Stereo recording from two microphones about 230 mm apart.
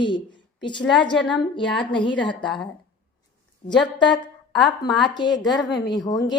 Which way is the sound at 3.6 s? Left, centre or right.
Left.